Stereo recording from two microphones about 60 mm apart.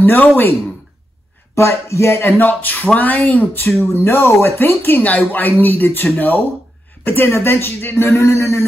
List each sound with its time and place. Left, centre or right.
0.0 s speech: left
1.5 s speech: left
2.4 s speech: left
3.8 s speech: left
4.6 s speech: left
7.1 s speech: left